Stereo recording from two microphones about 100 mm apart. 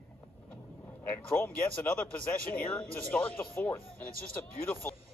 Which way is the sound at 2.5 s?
20° left (ahead or behind).